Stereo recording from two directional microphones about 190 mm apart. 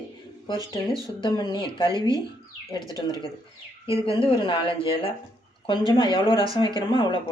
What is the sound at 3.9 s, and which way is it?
Speech, 30° left (ahead or behind).